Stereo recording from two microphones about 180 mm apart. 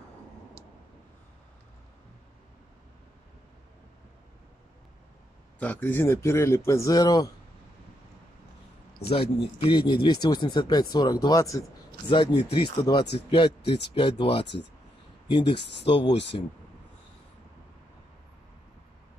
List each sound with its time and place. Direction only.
5.6 s speech: 10° left (ahead or behind)
9.1 s speech: 30° left (ahead or behind)
15.5 s speech: 75° left (ahead or behind)